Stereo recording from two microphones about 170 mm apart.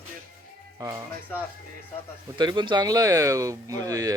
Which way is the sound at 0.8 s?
20° right (ahead or behind).